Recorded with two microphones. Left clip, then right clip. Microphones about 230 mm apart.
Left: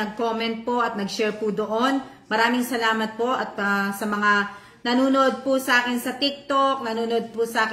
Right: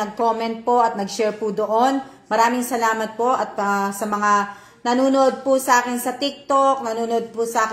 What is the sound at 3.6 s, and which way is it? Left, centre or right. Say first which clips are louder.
Speech: right 3 dB; centre.